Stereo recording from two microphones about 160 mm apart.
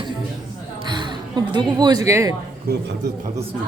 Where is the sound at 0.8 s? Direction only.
30° right (ahead or behind).